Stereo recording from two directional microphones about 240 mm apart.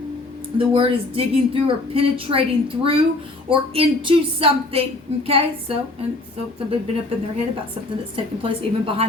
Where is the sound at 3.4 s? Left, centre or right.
Right.